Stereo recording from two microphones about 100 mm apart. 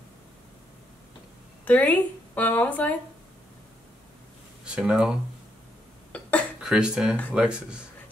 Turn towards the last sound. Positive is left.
turn(degrees=-10)  # may be behind; listen again after turning